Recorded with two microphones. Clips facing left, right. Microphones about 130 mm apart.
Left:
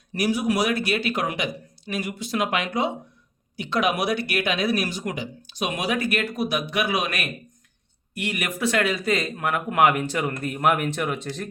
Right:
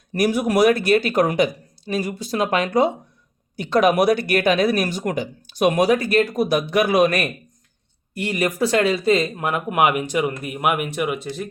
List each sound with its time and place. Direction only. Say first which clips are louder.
0.1 s speech: right 4 dB; 50° right (ahead or behind)
8.1 s speech: right 6 dB; 30° right (ahead or behind); by 11.4 s 10° right (ahead or behind)